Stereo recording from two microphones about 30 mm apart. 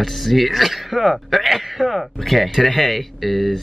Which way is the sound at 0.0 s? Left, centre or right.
Centre.